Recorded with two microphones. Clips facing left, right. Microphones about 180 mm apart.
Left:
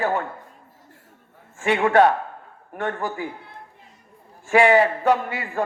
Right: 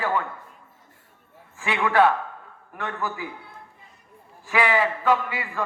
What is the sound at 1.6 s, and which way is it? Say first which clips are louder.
A man's voice: left 4 dB; 45° left (ahead or behind).